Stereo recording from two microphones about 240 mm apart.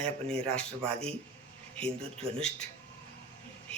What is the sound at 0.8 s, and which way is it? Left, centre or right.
Speech, right.